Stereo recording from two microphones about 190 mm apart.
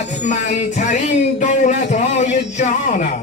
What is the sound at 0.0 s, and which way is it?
Music, 40° left (ahead or behind).